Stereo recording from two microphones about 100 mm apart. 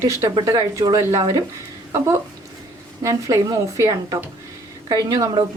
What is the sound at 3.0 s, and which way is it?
A woman's voice, 30° right (ahead or behind).